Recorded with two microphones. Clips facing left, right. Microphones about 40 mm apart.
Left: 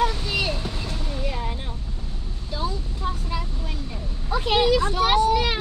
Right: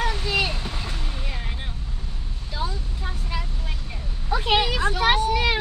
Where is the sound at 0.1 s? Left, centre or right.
Centre.